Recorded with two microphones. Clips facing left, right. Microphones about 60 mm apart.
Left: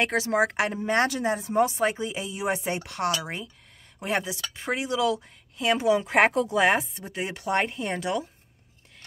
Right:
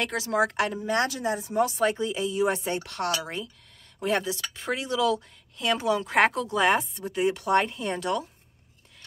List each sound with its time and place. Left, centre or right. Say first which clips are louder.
0.0 s speech: left 2 dB; left
1.8 s speech: right 1 dB; centre